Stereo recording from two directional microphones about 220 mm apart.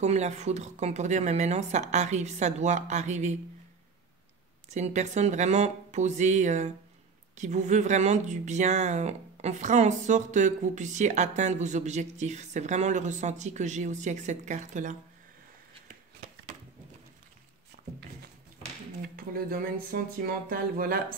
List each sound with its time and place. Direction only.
0.0 s speech: 30° right (ahead or behind)
4.6 s speech: 30° right (ahead or behind)
19.1 s speech: 40° right (ahead or behind)